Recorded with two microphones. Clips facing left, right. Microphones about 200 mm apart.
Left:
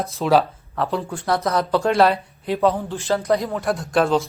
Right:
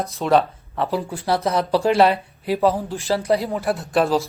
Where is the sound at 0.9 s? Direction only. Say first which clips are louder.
Right 1 dB; 15° right (ahead or behind).